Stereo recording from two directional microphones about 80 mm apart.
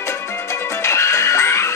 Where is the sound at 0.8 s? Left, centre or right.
Left.